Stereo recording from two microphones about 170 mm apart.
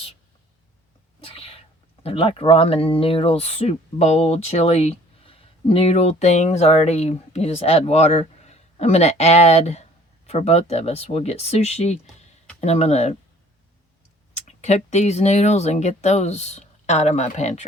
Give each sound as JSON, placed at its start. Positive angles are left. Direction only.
{"t": 1.2, "sound": "sneeze", "side_deg": 35}
{"t": 2.0, "sound": "speech", "side_deg": 30}
{"t": 14.3, "sound": "speech", "side_deg": 40}